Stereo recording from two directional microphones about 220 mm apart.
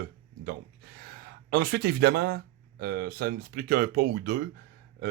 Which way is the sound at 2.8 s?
45° right (ahead or behind).